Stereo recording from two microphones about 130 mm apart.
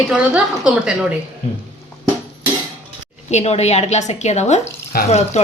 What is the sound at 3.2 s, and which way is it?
Speech, 60° left (ahead or behind).